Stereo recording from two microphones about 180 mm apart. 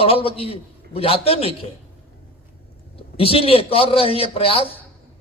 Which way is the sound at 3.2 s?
30° left (ahead or behind).